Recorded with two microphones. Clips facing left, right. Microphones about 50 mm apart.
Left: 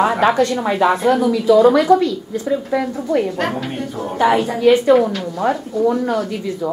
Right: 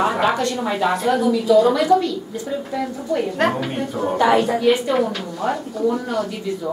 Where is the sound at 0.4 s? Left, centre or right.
Left.